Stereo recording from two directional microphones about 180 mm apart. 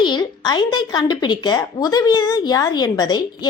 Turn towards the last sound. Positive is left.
turn(degrees=20)  # may be behind; listen again after turning